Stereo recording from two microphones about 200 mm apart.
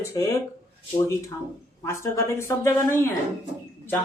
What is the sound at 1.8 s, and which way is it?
Speech, 15° left (ahead or behind).